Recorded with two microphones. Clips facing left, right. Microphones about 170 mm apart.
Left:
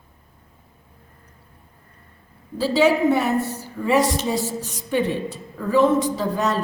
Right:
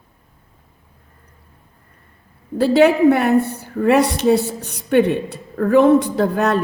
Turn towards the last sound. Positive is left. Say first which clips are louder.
# right 5 dB
turn(degrees=-60)  # may be behind; listen again after turning